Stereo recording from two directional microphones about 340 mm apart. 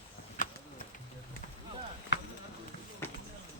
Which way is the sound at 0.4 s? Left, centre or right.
Left.